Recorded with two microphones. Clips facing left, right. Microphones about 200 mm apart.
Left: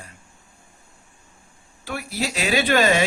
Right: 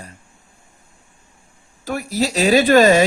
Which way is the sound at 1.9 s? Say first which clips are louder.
Right 7 dB; 40° right (ahead or behind).